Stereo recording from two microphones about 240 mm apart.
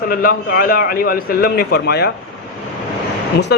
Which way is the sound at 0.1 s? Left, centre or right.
Left.